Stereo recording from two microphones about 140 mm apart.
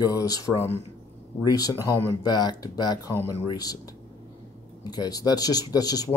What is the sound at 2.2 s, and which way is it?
Speech, 30° left (ahead or behind).